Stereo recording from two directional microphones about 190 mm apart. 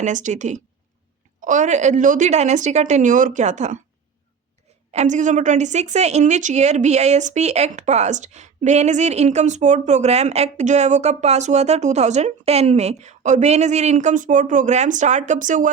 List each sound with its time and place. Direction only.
0.0 s a woman's voice: 40° right (ahead or behind)
4.9 s a woman's voice: 40° right (ahead or behind)